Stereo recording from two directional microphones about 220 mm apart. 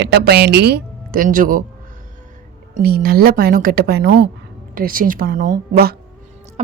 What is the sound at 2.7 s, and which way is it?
Speech, 45° right (ahead or behind).